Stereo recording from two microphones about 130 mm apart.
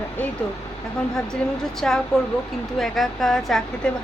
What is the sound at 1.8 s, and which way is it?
Speech, 5° left (ahead or behind).